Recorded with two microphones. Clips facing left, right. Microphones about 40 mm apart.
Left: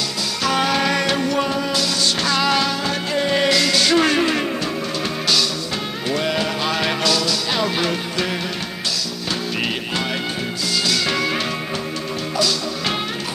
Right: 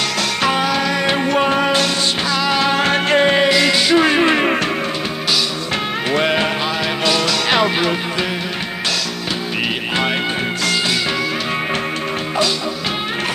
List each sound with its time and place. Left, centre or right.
0.6 s music: centre
1.0 s music: right
2.2 s music: centre
2.7 s music: right
3.3 s music: right
4.2 s music: right
6.1 s music: right
7.6 s music: centre